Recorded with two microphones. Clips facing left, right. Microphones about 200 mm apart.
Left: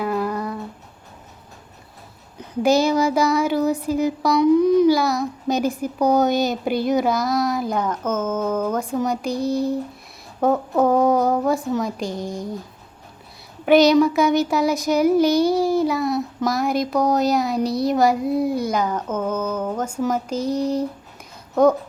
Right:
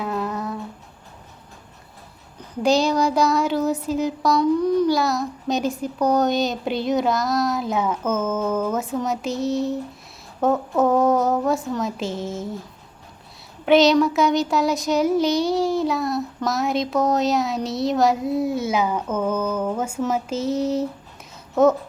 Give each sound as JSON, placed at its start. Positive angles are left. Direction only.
{"t": 0.0, "sound": "humming", "side_deg": 0}
{"t": 2.6, "sound": "child singing", "side_deg": 0}
{"t": 10.4, "sound": "child singing", "side_deg": 0}
{"t": 13.7, "sound": "child singing", "side_deg": 0}
{"t": 17.6, "sound": "speech", "side_deg": -20}
{"t": 17.8, "sound": "child singing", "side_deg": 0}
{"t": 19.1, "sound": "a woman's voice", "side_deg": -10}
{"t": 20.6, "sound": "child singing", "side_deg": -5}
{"t": 21.5, "sound": "a child's voice", "side_deg": -5}